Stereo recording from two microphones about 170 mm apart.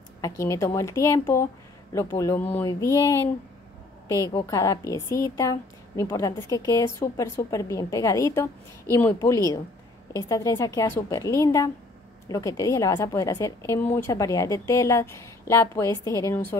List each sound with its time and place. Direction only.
0.2 s a woman's voice: 20° left (ahead or behind)